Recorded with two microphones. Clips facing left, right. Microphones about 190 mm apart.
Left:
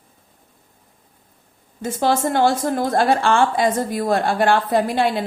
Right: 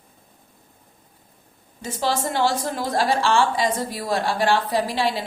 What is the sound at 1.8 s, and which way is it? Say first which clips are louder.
A woman's voice: left 5 dB; 50° left (ahead or behind).